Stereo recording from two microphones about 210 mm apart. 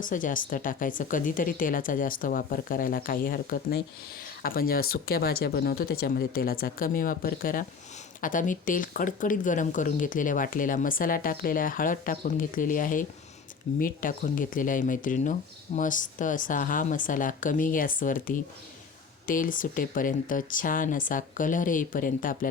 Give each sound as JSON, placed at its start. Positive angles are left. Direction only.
{"t": 0.0, "sound": "speech", "side_deg": 40}